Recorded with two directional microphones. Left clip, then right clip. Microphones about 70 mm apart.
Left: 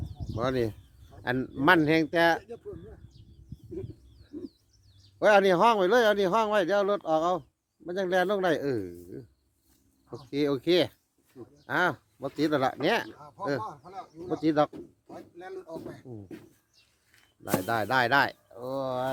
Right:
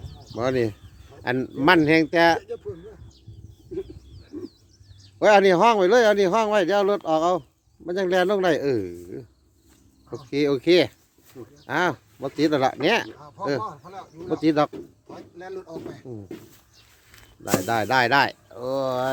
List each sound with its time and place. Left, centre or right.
0.3 s speech: centre
5.2 s a man's voice: centre
6.6 s a man's voice: centre
10.2 s speech: centre
14.3 s speech: centre
15.4 s speech: left
16.0 s speech: centre
17.4 s speech: centre
18.5 s speech: right